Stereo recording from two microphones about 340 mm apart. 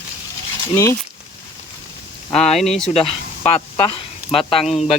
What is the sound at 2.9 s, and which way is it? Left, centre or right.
Speech, centre.